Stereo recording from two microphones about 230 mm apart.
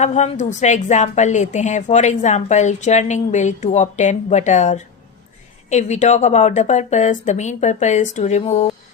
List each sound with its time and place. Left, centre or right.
0.0 s a woman's voice: left